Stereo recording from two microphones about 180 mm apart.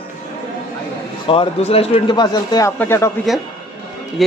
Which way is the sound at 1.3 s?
30° left (ahead or behind).